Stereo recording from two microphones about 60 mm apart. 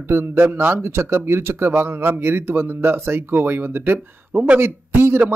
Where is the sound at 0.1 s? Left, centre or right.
Right.